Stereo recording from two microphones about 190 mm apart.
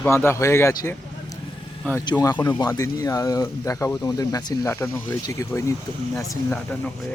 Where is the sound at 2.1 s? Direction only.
20° left (ahead or behind).